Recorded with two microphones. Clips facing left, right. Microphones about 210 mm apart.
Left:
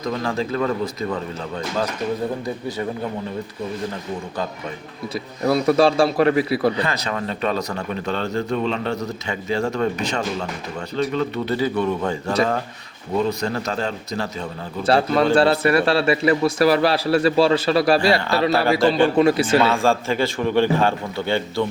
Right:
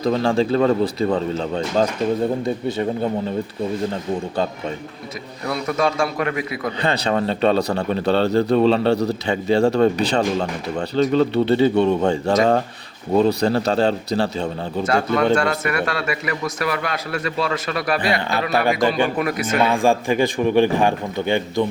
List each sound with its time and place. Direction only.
0.0 s speech: 30° right (ahead or behind)
5.4 s a man's voice: 30° left (ahead or behind)
6.7 s a man's voice: 30° right (ahead or behind)
14.8 s a man's voice: 30° left (ahead or behind)
18.5 s a man's voice: 15° right (ahead or behind)
19.1 s speech: 30° left (ahead or behind)
19.5 s a man's voice: 15° right (ahead or behind)